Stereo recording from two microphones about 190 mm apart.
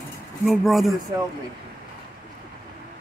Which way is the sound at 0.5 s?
Centre (ahead or behind).